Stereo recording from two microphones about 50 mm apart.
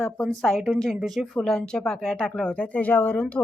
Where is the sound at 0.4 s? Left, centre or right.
Centre.